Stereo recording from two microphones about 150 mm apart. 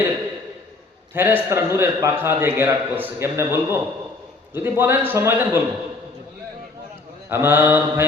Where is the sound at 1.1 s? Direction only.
15° right (ahead or behind).